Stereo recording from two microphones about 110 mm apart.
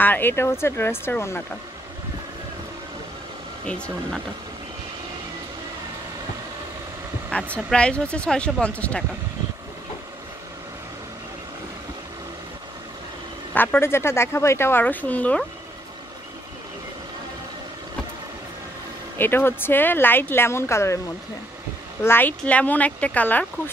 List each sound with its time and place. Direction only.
0.0 s speech: 20° left (ahead or behind)
3.6 s speech: 10° left (ahead or behind)
7.5 s speech: 10° left (ahead or behind)
13.6 s speech: 20° left (ahead or behind)
19.1 s speech: 20° left (ahead or behind)
22.0 s speech: 20° left (ahead or behind)